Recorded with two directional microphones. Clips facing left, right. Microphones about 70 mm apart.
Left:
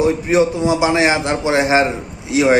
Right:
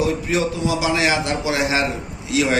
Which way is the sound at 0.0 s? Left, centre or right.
Left.